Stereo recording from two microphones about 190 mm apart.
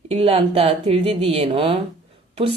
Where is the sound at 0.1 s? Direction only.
30° right (ahead or behind).